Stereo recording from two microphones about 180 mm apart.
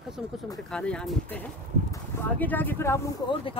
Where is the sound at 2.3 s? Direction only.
10° left (ahead or behind).